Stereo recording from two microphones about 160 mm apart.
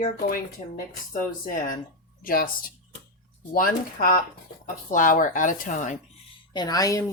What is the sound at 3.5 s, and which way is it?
Speech, 65° left (ahead or behind).